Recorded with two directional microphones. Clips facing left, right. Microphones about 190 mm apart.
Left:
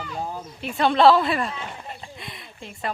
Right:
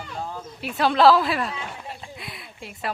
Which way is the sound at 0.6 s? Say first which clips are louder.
Left 1 dB; centre (ahead or behind).